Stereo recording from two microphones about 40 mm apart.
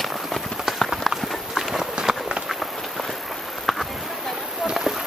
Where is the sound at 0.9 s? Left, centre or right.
Centre.